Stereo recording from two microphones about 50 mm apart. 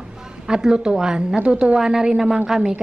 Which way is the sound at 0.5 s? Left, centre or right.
Centre.